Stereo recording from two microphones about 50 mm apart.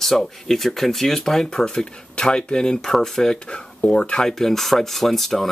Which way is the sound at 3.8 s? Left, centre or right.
Left.